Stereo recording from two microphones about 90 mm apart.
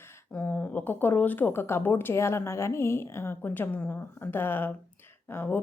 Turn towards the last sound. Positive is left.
turn(degrees=25)  # may be behind; listen again after turning